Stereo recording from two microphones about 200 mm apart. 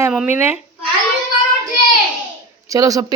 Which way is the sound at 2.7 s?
15° right (ahead or behind).